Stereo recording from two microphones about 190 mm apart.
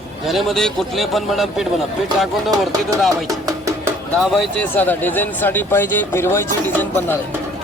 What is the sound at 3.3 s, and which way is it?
Music, 20° right (ahead or behind).